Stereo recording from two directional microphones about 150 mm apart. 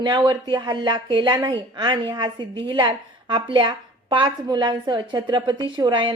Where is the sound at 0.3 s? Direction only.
30° right (ahead or behind).